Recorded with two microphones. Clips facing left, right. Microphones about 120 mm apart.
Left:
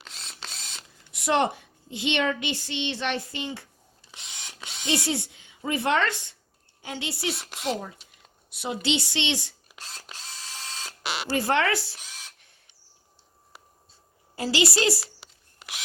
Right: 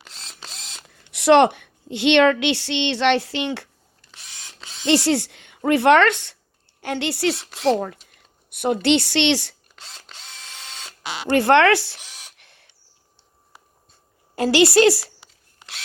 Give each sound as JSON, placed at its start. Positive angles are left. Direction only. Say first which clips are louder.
{"t": 0.0, "sound": "camera", "louder": "right 1 dB", "side_deg": 0}
{"t": 0.9, "sound": "a woman's voice", "louder": "right 11 dB", "side_deg": -70}
{"t": 4.1, "sound": "ratchet", "louder": "left 1 dB", "side_deg": 20}
{"t": 4.9, "sound": "a woman's voice", "louder": "right 9 dB", "side_deg": -70}
{"t": 8.1, "sound": "speech", "louder": "right 1 dB", "side_deg": -55}
{"t": 11.3, "sound": "a woman's voice", "louder": "right 10 dB", "side_deg": -70}
{"t": 12.4, "sound": "bird", "louder": "right 7 dB", "side_deg": -80}
{"t": 14.3, "sound": "a woman's voice", "louder": "right 10 dB", "side_deg": -65}